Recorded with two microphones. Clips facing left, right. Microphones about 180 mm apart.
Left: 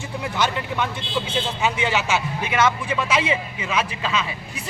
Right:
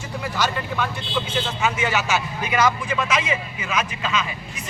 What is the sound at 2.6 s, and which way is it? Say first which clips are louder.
Speech: even; 25° left (ahead or behind).